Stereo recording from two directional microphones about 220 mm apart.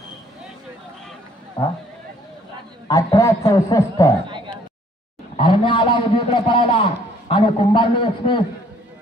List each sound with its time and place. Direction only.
1.6 s speech: 20° left (ahead or behind)
3.2 s a man's voice: 15° left (ahead or behind)
5.4 s a man's voice: 20° left (ahead or behind)